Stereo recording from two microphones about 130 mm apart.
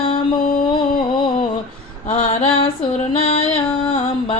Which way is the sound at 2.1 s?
45° left (ahead or behind).